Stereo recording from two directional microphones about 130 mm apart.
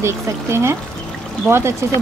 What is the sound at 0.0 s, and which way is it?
Speech, 20° right (ahead or behind).